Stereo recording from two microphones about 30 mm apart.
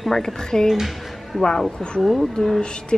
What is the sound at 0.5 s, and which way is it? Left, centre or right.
Speech, centre.